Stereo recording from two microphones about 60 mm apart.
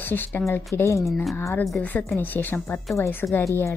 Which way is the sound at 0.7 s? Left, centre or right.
Left.